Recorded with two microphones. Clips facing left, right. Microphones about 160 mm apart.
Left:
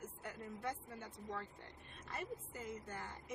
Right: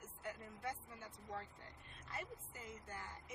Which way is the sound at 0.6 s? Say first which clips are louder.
Left 2 dB; 65° left (ahead or behind).